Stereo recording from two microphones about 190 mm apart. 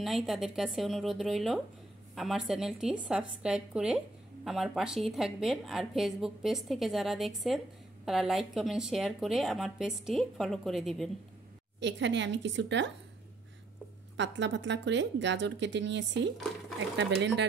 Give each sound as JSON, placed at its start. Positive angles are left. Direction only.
{"t": 0.0, "sound": "a woman's voice", "side_deg": 0}
{"t": 11.8, "sound": "a woman's voice", "side_deg": -70}
{"t": 14.1, "sound": "a woman's voice", "side_deg": -70}